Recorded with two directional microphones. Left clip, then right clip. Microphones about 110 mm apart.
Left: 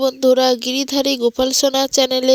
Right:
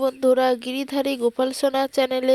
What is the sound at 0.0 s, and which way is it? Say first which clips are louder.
Speech: left 5 dB; 40° left (ahead or behind).